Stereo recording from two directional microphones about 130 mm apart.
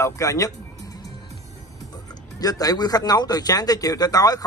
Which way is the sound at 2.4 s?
30° left (ahead or behind).